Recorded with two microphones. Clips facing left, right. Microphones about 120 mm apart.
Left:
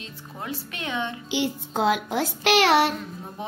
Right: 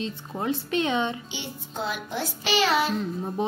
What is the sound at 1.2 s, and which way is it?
A woman's voice, 90° left.